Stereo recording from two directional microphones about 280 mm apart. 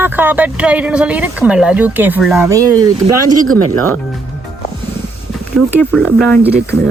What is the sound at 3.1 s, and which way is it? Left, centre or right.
Speech, right.